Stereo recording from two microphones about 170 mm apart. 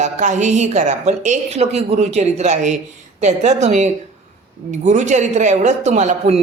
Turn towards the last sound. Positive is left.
turn(degrees=-45)  # may be behind; listen again after turning